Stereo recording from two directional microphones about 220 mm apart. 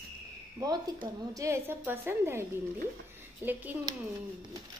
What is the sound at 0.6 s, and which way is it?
A woman's voice, 15° right (ahead or behind).